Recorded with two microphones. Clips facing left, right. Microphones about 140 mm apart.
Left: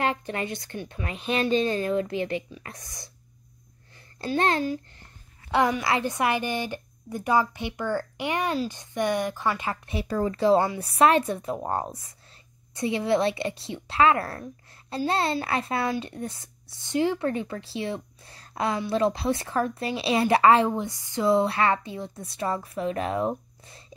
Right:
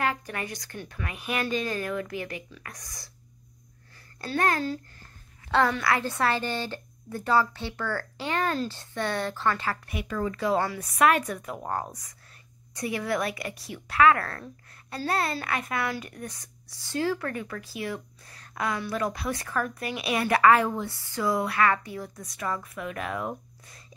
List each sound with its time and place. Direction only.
0.0 s speech: 25° left (ahead or behind)
4.3 s speech: 20° left (ahead or behind)
9.9 s speech: 35° left (ahead or behind)